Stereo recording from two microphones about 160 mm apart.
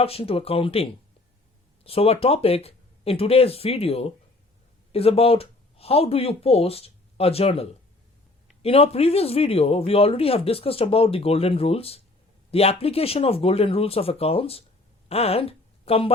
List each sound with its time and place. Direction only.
0.0 s speech: 35° left (ahead or behind)